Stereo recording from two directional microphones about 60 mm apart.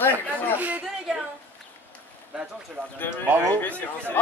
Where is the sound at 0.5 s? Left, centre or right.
Right.